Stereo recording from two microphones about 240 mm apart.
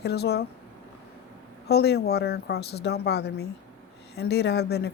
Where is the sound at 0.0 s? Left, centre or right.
Left.